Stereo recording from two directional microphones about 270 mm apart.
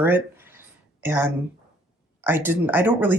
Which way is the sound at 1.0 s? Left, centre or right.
Centre.